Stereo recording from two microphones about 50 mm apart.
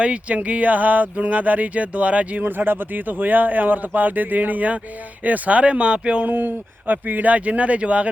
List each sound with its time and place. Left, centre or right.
0.0 s speech: right
2.4 s speech: right
6.2 s speech: right